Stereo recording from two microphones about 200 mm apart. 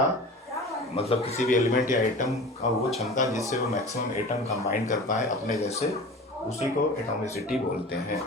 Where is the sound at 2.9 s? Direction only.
Centre (ahead or behind).